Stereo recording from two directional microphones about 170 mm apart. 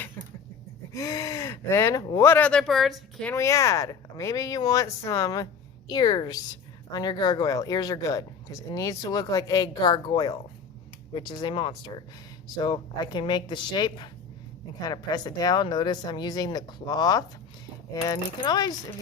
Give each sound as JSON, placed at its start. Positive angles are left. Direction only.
{"t": 0.9, "sound": "speech", "side_deg": 20}
{"t": 3.3, "sound": "speech", "side_deg": 15}